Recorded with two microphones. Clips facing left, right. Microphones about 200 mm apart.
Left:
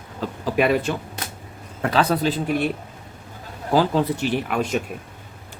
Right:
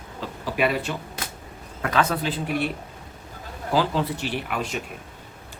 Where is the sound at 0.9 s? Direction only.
45° left (ahead or behind).